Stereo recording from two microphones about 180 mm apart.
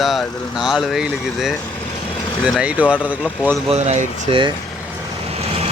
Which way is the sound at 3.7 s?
40° right (ahead or behind).